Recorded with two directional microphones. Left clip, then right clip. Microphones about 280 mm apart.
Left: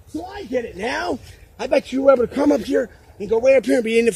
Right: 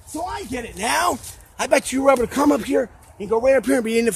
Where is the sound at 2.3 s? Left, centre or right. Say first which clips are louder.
Even; right.